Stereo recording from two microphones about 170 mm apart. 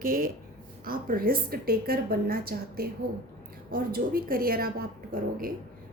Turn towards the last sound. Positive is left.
turn(degrees=-55)  # may be behind; listen again after turning